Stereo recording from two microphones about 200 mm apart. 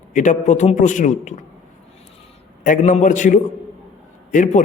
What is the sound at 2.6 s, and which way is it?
A man's voice, 40° left (ahead or behind).